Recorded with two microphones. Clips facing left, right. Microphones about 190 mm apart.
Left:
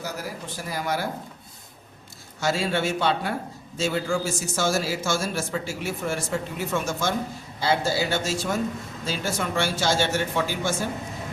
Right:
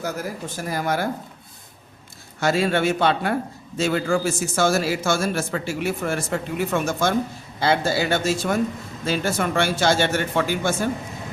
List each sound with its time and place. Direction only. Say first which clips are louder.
0.0 s speech: right 5 dB; 50° right (ahead or behind)
2.4 s a man's voice: right 4 dB; 60° right (ahead or behind)